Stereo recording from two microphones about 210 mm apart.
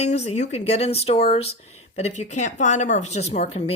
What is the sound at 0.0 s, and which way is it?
Speech, 30° left (ahead or behind).